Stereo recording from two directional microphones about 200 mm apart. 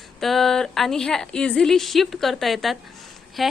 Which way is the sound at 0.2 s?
Centre (ahead or behind).